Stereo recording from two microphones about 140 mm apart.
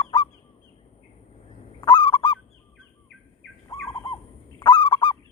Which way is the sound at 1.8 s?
35° left (ahead or behind).